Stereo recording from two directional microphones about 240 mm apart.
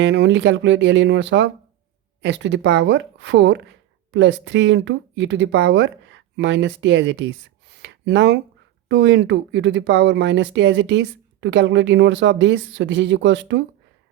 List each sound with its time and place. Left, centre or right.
0.0 s speech: right